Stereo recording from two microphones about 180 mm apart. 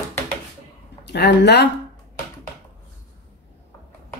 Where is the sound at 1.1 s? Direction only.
70° left (ahead or behind).